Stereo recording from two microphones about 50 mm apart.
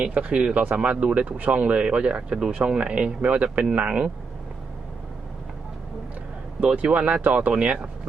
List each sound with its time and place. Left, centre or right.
0.0 s speech: right
6.7 s speech: right